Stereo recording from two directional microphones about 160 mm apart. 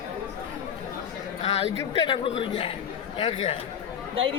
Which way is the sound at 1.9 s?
30° left (ahead or behind).